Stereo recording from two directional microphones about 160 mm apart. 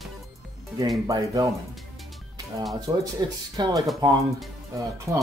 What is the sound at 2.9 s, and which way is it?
Speech, 25° right (ahead or behind).